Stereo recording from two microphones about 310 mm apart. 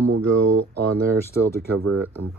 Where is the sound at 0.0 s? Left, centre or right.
Right.